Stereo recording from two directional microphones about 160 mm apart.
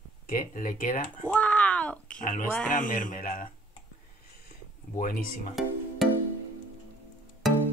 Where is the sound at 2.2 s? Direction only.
55° left (ahead or behind).